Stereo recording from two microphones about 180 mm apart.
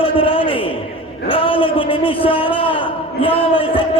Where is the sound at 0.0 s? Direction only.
30° left (ahead or behind).